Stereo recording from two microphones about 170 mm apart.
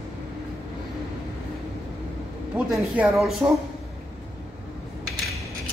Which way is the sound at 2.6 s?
5° right (ahead or behind).